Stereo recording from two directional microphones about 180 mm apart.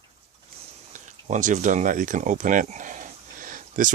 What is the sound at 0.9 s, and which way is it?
Speech, 45° right (ahead or behind).